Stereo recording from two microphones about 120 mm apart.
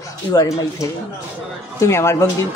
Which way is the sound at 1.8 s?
25° left (ahead or behind).